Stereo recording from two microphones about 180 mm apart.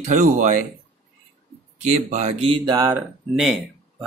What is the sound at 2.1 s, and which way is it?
Speech, 40° right (ahead or behind).